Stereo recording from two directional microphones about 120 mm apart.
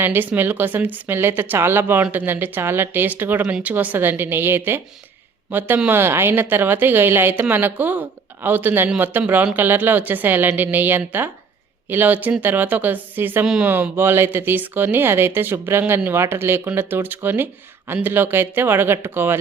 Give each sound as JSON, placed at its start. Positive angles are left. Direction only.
{"t": 0.0, "sound": "speech", "side_deg": -15}